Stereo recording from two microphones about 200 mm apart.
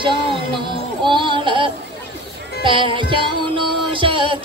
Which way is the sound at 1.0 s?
25° right (ahead or behind).